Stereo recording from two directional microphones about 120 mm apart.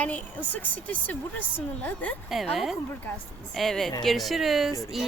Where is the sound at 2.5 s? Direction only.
Centre (ahead or behind).